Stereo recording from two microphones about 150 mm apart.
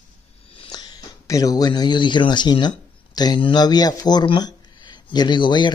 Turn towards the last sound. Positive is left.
turn(degrees=30)  # may be behind; listen again after turning